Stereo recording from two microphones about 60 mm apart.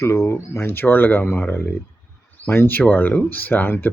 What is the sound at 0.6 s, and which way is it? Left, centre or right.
Speech, left.